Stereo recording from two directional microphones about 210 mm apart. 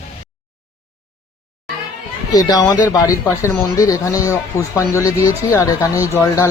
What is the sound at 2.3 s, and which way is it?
Speech, 15° left (ahead or behind).